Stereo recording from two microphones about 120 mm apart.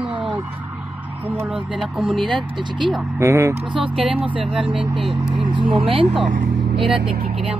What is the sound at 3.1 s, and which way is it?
Speech, 25° right (ahead or behind).